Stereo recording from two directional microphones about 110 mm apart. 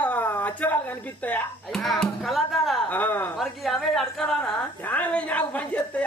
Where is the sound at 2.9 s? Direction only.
15° left (ahead or behind).